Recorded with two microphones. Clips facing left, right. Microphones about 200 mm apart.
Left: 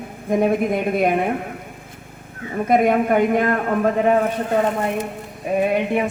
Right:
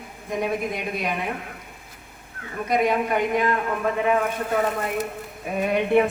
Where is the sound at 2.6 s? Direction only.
55° left (ahead or behind); by 4.9 s 30° left (ahead or behind).